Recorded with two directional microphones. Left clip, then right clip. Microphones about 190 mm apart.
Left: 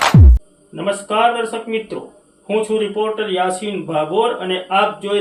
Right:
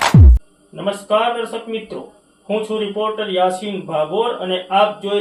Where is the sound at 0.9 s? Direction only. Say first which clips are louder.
Left 1 dB; 25° left (ahead or behind).